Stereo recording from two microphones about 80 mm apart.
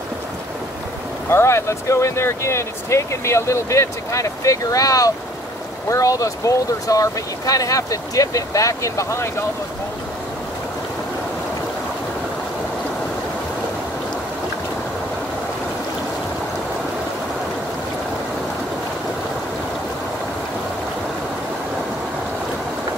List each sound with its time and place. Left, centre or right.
1.3 s speech: left